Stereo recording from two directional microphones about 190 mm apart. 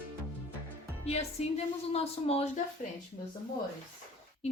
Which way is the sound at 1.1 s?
35° left (ahead or behind).